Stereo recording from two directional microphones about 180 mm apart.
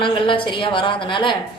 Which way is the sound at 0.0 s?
30° left (ahead or behind).